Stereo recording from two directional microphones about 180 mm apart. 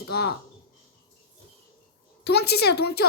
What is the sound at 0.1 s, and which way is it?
Speech, 60° left (ahead or behind).